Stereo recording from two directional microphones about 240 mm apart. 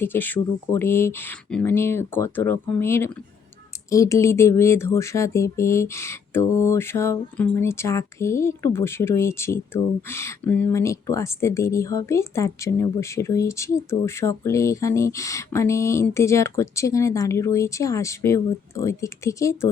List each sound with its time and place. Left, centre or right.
0.0 s speech: centre